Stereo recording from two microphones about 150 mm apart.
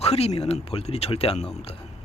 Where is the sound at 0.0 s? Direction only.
45° left (ahead or behind).